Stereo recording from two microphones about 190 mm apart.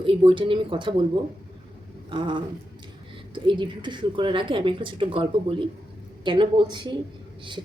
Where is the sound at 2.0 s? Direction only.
25° right (ahead or behind).